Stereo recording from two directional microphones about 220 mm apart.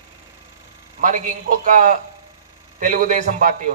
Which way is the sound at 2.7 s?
35° right (ahead or behind).